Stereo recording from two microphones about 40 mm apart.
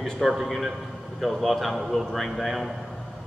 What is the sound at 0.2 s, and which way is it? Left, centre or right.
A man's voice, centre.